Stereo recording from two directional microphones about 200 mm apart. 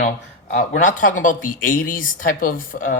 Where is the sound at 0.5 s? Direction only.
40° left (ahead or behind).